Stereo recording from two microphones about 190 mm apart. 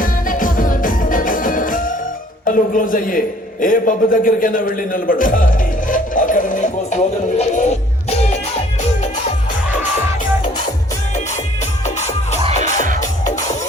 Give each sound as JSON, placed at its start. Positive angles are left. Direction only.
{"t": 0.0, "sound": "music", "side_deg": 45}
{"t": 2.5, "sound": "a man's voice", "side_deg": 45}
{"t": 5.9, "sound": "music", "side_deg": 45}
{"t": 11.9, "sound": "music", "side_deg": 35}